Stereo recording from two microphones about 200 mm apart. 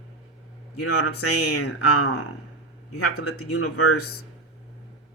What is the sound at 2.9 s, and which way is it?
A man's voice, 90° left.